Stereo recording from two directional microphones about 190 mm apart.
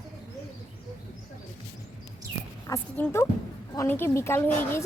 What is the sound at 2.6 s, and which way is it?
Speech, 15° left (ahead or behind).